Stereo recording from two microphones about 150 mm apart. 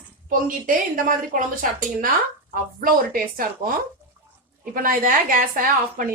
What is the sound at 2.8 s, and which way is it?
Speech, 70° right (ahead or behind).